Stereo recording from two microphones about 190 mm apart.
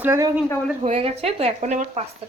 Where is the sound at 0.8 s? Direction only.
35° right (ahead or behind).